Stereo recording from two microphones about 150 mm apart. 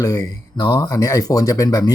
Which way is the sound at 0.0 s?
25° left (ahead or behind).